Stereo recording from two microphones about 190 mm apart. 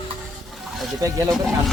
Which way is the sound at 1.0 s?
15° right (ahead or behind).